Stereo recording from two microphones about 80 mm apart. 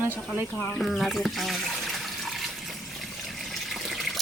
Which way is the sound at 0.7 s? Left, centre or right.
Centre.